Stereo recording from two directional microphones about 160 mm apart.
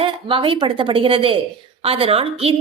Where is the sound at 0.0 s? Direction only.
35° right (ahead or behind).